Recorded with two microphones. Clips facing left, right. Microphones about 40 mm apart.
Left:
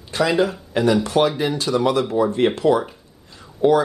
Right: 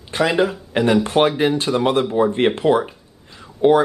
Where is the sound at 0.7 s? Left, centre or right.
Right.